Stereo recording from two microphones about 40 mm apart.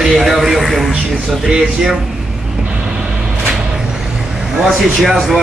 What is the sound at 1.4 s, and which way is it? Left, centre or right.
Speech, centre.